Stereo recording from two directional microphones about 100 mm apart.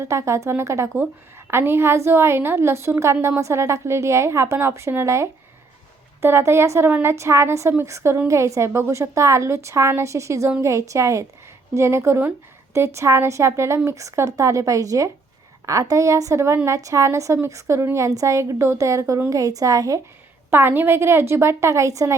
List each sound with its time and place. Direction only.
0.0 s a woman's voice: 30° right (ahead or behind)
20.5 s a woman's voice: 20° right (ahead or behind)